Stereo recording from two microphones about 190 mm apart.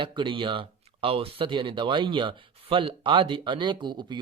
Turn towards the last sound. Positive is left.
turn(degrees=-25)  # may be behind; listen again after turning